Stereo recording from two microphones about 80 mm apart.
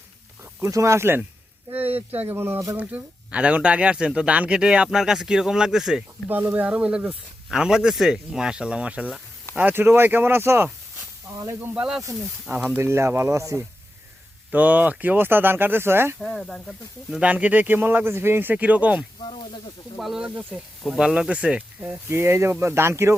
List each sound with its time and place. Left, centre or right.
0.6 s a man's voice: right
2.7 s speech: centre
6.2 s a man's voice: right
11.7 s a man's voice: centre
12.8 s speech: right
14.5 s a man's voice: centre
16.1 s speech: centre
17.2 s a man's voice: centre
20.0 s speech: centre
21.8 s speech: right